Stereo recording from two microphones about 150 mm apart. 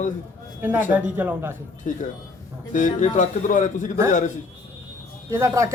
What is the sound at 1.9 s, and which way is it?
A man's voice, 60° left (ahead or behind).